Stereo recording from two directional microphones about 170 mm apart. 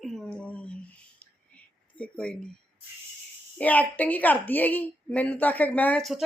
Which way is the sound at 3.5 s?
10° left (ahead or behind).